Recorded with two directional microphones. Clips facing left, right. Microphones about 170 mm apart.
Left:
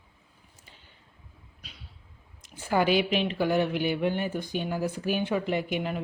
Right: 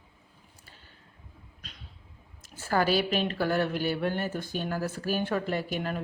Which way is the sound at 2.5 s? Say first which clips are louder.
Left 2 dB; 15° left (ahead or behind).